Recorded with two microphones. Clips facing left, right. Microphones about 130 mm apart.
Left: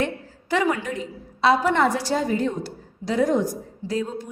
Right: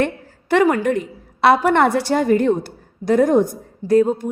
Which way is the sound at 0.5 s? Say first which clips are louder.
Right 7 dB; 55° right (ahead or behind).